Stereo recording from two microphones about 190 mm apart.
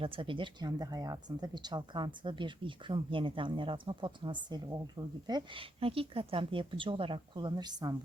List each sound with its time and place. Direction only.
0.0 s speech: 25° right (ahead or behind)